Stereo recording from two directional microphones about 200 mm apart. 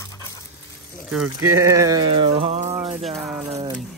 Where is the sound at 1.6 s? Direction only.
15° right (ahead or behind).